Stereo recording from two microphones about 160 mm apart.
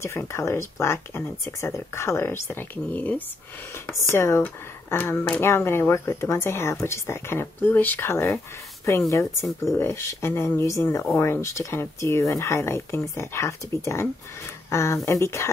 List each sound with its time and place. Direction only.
0.0 s speech: 15° left (ahead or behind)
9.6 s speech: 15° left (ahead or behind)